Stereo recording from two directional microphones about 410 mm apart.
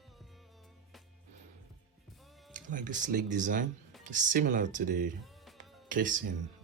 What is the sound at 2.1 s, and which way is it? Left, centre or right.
Music, centre.